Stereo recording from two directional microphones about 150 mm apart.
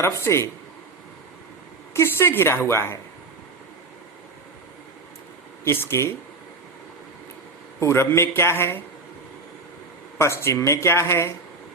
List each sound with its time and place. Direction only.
0.0 s speech: 20° left (ahead or behind)
1.9 s speech: 15° left (ahead or behind)
5.6 s speech: 15° left (ahead or behind)
7.8 s speech: 20° left (ahead or behind)
10.2 s speech: 20° left (ahead or behind)